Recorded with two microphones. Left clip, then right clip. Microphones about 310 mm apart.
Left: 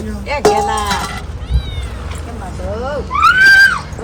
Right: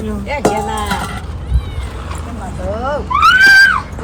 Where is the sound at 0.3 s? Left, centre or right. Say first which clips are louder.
Left 4 dB; centre.